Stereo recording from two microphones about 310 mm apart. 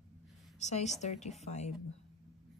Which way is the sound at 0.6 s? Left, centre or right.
Left.